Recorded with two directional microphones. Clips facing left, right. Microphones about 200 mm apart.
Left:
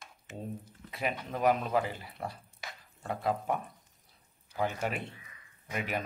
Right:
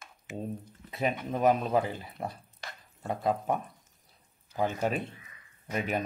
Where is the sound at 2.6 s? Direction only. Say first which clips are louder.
Right 1 dB; centre (ahead or behind).